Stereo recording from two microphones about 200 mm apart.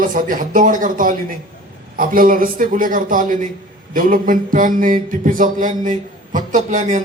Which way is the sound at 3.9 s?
45° right (ahead or behind).